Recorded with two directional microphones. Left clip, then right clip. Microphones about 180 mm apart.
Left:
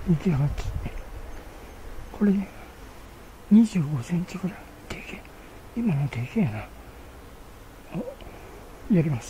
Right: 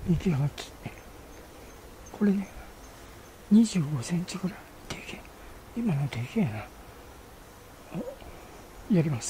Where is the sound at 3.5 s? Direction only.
5° right (ahead or behind).